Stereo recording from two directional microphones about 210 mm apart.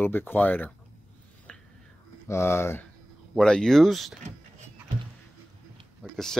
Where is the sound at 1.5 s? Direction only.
5° left (ahead or behind).